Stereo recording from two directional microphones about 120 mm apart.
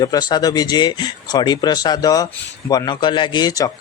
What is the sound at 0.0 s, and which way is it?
A man's voice, 35° left (ahead or behind).